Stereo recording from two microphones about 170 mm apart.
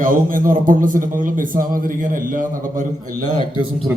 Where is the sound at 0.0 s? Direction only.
55° right (ahead or behind).